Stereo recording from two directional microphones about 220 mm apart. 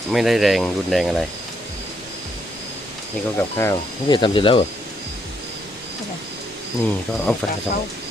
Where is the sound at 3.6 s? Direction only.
15° left (ahead or behind).